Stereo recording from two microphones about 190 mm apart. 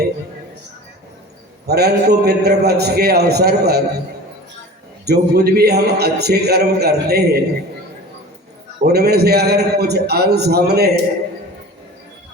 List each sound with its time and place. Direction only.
1.6 s a man's voice: 55° right (ahead or behind)
5.0 s a man's voice: 55° right (ahead or behind)
8.9 s a man's voice: 60° right (ahead or behind)